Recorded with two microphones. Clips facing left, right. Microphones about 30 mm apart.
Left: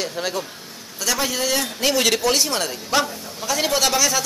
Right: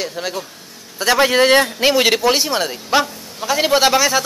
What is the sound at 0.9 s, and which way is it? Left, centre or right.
Speech, right.